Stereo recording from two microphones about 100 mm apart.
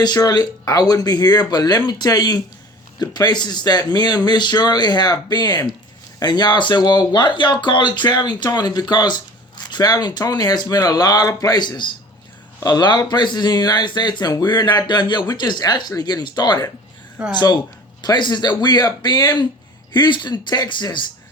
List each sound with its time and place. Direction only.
0.0 s speech: 40° left (ahead or behind)